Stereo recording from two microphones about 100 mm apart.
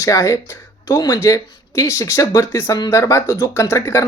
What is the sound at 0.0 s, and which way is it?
Speech, 30° left (ahead or behind).